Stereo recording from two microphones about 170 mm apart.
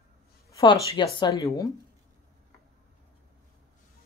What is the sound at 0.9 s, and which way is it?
Speech, 25° left (ahead or behind).